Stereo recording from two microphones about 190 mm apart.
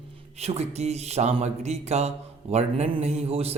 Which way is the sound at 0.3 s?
35° right (ahead or behind).